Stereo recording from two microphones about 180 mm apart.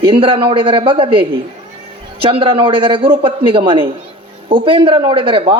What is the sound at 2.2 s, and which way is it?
A man's voice, 30° right (ahead or behind).